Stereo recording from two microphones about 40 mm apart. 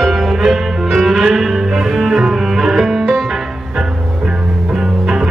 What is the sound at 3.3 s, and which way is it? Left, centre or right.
Music, centre.